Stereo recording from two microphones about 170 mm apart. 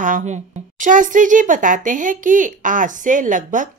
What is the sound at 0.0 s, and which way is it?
Speech, 45° right (ahead or behind).